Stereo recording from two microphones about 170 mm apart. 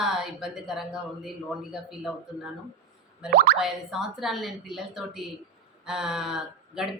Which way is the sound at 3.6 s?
Centre (ahead or behind).